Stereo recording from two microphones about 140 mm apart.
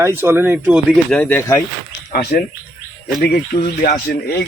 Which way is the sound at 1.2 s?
15° left (ahead or behind).